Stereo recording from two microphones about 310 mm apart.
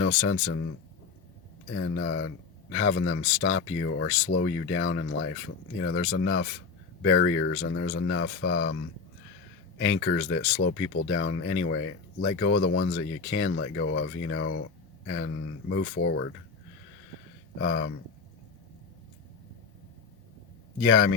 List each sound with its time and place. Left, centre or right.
0.0 s speech: left
1.7 s speech: left
9.8 s speech: left
15.0 s a sound: left
15.7 s speech: left
17.6 s speech: left
20.9 s speech: left